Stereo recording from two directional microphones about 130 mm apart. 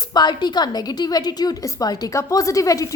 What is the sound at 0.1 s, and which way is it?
A woman's voice, 35° left (ahead or behind).